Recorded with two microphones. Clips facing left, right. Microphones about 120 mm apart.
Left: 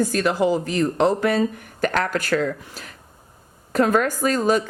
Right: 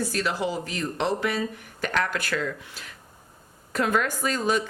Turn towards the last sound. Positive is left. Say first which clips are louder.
# left 6 dB
turn(degrees=45)  # may be behind; listen again after turning